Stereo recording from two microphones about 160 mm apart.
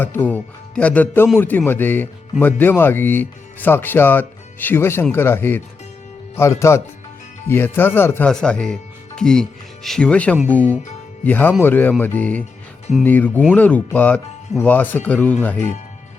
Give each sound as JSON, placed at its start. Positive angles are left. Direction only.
{"t": 0.0, "sound": "speech", "side_deg": 10}